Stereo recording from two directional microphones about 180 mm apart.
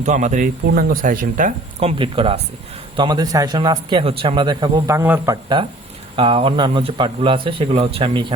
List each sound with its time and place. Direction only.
0.0 s a man's voice: 40° right (ahead or behind)